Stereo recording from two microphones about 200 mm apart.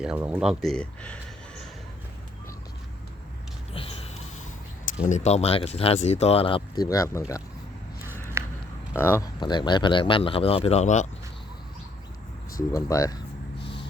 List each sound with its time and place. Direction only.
0.0 s speech: 5° right (ahead or behind)
3.8 s a sound: 30° left (ahead or behind)
5.0 s speech: 35° left (ahead or behind)
6.8 s speech: 15° left (ahead or behind)
8.0 s a sound: 10° right (ahead or behind)
9.0 s speech: 15° left (ahead or behind); by 11.1 s 35° left (ahead or behind)
12.7 s speech: 15° left (ahead or behind)